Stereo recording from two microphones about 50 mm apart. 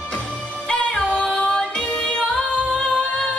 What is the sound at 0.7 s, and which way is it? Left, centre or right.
Music, left.